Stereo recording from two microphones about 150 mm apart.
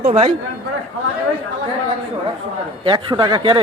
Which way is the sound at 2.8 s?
30° right (ahead or behind).